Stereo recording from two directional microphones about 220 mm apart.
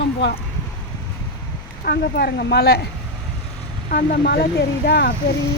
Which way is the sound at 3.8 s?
40° left (ahead or behind).